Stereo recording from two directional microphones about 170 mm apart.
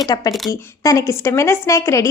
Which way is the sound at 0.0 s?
25° left (ahead or behind).